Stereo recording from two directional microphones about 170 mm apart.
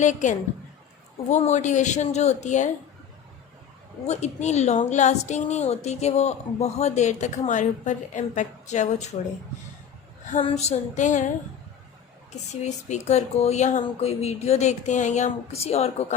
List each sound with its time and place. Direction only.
0.0 s a woman's voice: 45° left (ahead or behind)
4.0 s a woman's voice: 40° left (ahead or behind)
10.4 s a woman's voice: 40° left (ahead or behind)
12.5 s speech: 40° left (ahead or behind)